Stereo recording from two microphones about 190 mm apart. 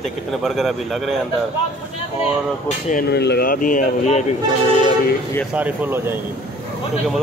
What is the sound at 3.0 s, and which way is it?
Speech, 60° left (ahead or behind).